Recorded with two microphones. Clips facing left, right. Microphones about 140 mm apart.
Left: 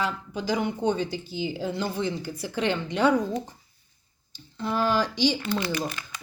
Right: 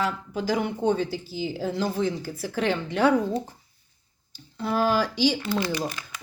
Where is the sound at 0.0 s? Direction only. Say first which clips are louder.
Right 2 dB; 5° right (ahead or behind).